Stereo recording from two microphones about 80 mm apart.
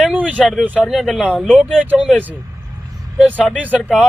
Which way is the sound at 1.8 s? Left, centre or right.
Centre.